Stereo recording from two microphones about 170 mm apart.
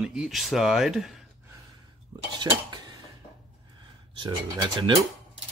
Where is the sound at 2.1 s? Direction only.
25° right (ahead or behind).